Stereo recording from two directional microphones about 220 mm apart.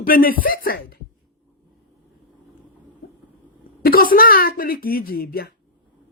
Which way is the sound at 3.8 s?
40° left (ahead or behind).